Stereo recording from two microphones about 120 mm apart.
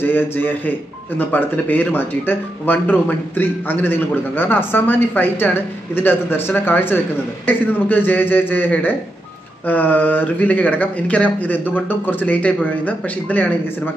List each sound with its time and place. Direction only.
0.0 s speech: 15° left (ahead or behind)